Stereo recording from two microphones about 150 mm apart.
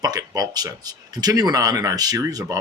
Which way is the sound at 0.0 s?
25° right (ahead or behind).